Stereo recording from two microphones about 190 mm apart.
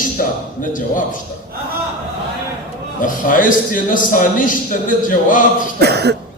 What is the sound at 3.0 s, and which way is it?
A man's voice, 45° left (ahead or behind).